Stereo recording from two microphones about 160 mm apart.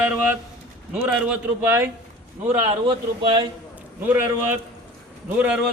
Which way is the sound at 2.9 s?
30° right (ahead or behind).